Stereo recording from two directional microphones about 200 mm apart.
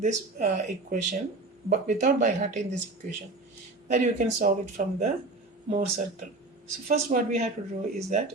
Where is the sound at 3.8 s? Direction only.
35° right (ahead or behind).